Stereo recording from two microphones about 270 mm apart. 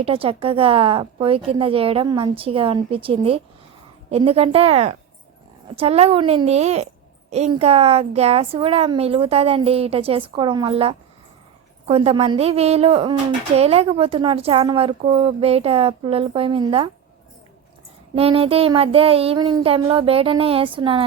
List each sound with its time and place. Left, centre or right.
0.0 s a woman's voice: right
18.1 s a woman's voice: right